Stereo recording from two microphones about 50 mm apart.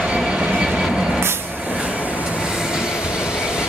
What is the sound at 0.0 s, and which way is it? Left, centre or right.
Vehicle, centre.